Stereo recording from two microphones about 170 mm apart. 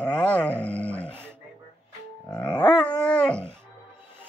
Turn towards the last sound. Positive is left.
turn(degrees=5)  # may be behind; listen again after turning